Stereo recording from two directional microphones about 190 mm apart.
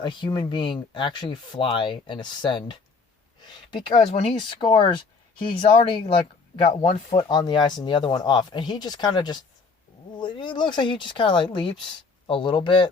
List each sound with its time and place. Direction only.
0.0 s speech: 25° left (ahead or behind)